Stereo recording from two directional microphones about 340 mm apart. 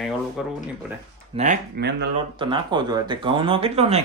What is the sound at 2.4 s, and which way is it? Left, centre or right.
Speech, centre.